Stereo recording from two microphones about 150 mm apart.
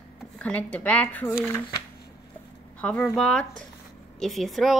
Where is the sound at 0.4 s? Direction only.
10° left (ahead or behind).